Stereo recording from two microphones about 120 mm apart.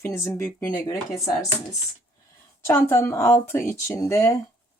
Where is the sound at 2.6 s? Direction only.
20° left (ahead or behind).